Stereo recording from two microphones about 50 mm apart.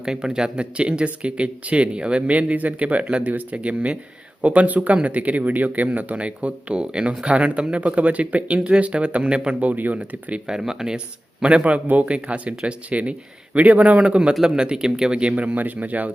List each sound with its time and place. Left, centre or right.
0.0 s speech: centre; by 10.4 s right
10.4 s speech: centre; by 16.1 s right